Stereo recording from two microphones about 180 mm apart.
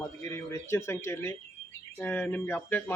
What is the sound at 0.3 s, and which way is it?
Speech, 15° left (ahead or behind).